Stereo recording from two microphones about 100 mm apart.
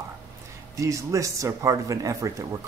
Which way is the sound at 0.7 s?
30° right (ahead or behind).